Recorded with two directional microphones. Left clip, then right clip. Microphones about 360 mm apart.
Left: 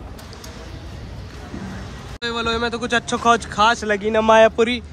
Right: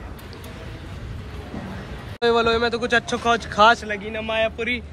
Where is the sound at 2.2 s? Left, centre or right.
Centre.